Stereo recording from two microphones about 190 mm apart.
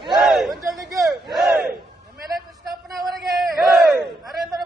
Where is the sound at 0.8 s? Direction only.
20° right (ahead or behind).